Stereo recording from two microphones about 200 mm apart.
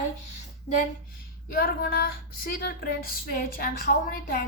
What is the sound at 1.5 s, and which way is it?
Speech, 50° left (ahead or behind).